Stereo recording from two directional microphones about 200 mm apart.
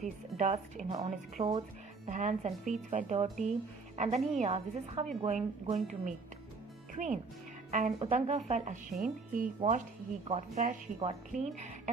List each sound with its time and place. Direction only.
0.0 s speech: 35° right (ahead or behind)
0.9 s a woman's voice: 25° right (ahead or behind); by 9.5 s 40° right (ahead or behind)
10.2 s a woman's voice: 30° right (ahead or behind)